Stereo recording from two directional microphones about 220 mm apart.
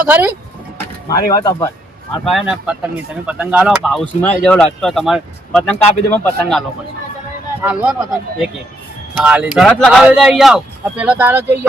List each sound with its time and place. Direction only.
0.0 s speech: 10° right (ahead or behind)
1.3 s speech: 15° left (ahead or behind)
2.2 s speech: centre (ahead or behind)
9.1 s speech: 5° right (ahead or behind)